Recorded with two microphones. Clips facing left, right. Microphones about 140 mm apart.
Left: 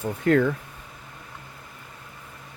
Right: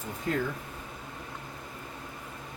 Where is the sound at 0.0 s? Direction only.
70° left (ahead or behind).